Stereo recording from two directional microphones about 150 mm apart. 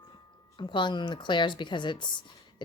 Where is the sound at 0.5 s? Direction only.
30° left (ahead or behind).